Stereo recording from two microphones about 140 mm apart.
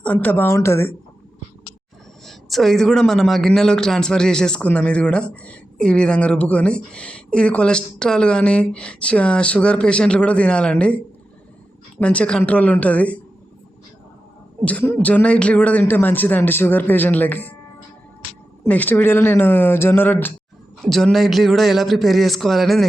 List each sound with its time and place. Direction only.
0.0 s speech: 10° left (ahead or behind)
2.2 s speech: centre (ahead or behind)
11.9 s speech: 10° left (ahead or behind)
14.6 s speech: 10° left (ahead or behind)
18.7 s speech: 10° left (ahead or behind)
20.8 s a man's voice: centre (ahead or behind)